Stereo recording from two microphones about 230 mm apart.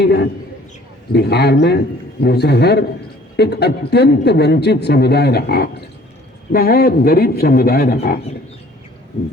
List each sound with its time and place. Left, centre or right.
0.0 s a man's voice: left